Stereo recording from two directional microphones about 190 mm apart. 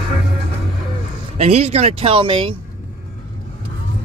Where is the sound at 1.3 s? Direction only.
35° right (ahead or behind).